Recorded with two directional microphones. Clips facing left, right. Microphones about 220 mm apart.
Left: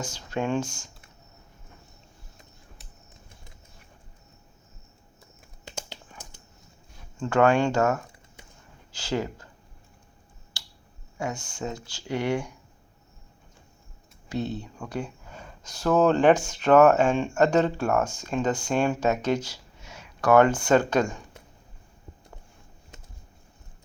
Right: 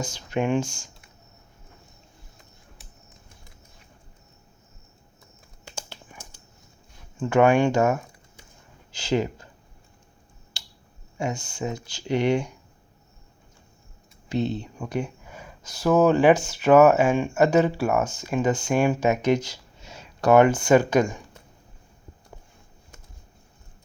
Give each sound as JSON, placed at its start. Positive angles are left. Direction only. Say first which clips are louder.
{"t": 0.0, "sound": "speech", "louder": "right 3 dB", "side_deg": -15}
{"t": 5.6, "sound": "a sound", "louder": "left 1 dB", "side_deg": 15}
{"t": 7.2, "sound": "speech", "louder": "right 2 dB", "side_deg": -15}
{"t": 9.0, "sound": "speech", "louder": "right 4 dB", "side_deg": -20}
{"t": 11.3, "sound": "speech", "louder": "right 3 dB", "side_deg": -10}
{"t": 11.9, "sound": "speech", "louder": "right 5 dB", "side_deg": -20}
{"t": 14.3, "sound": "speech", "louder": "right 4 dB", "side_deg": -20}
{"t": 15.3, "sound": "speech", "louder": "right 1 dB", "side_deg": -10}
{"t": 19.8, "sound": "a sound", "louder": "right 3 dB", "side_deg": -30}
{"t": 20.3, "sound": "speech", "louder": "right 2 dB", "side_deg": -10}